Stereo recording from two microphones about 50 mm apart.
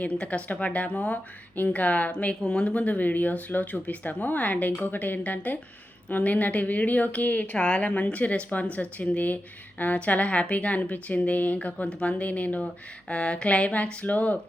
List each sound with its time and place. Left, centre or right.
0.0 s speech: left
2.4 s speech: centre